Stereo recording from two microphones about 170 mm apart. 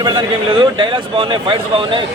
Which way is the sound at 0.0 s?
25° right (ahead or behind).